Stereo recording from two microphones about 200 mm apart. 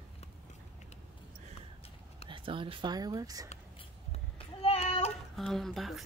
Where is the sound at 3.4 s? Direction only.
30° left (ahead or behind).